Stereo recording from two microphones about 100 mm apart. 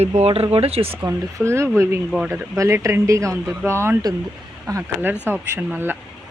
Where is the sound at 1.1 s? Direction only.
25° right (ahead or behind).